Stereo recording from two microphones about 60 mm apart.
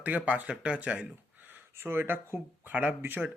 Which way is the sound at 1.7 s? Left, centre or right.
Right.